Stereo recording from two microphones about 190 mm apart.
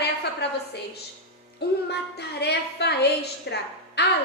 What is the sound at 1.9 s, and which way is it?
A woman's voice, 60° left (ahead or behind).